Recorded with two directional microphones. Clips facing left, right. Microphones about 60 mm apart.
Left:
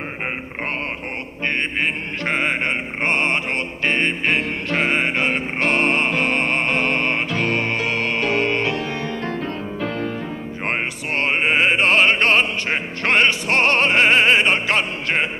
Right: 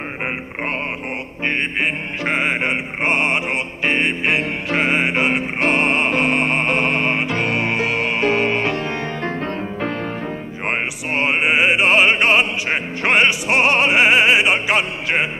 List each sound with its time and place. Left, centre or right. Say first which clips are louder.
0.2 s a sound: right 3 dB; centre
1.4 s music: right 1 dB; centre
8.6 s music: right 2 dB; right
10.6 s music: right 1 dB; centre